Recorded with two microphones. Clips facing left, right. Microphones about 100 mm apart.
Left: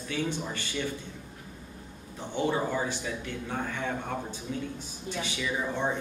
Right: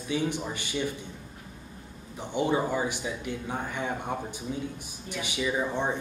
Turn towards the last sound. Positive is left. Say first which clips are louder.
# right 2 dB
turn(degrees=-15)  # may be behind; listen again after turning